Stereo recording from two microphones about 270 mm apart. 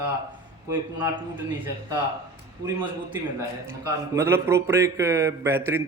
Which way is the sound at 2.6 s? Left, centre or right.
Centre.